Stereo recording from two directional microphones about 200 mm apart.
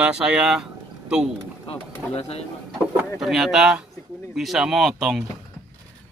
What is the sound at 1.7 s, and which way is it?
Speech, 30° left (ahead or behind).